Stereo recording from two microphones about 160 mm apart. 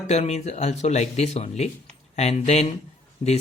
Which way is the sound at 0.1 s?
40° left (ahead or behind).